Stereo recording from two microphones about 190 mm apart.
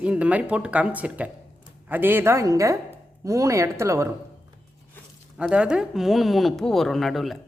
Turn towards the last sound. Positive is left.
turn(degrees=0)  # may be behind; listen again after turning